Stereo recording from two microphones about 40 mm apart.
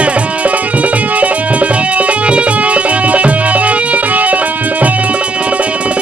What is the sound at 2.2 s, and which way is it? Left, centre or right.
Music, right.